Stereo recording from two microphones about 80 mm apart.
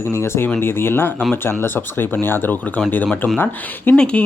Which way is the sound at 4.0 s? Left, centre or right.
Centre.